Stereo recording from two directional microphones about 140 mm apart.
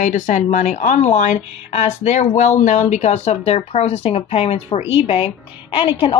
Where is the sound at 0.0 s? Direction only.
60° left (ahead or behind).